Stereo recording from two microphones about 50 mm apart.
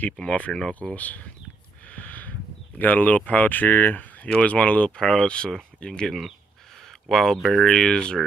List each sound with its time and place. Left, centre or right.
0.1 s speech: centre
0.7 s speech: left
1.9 s a sound: left
2.8 s speech: left
4.9 s speech: centre
6.8 s a sound: centre
7.6 s speech: centre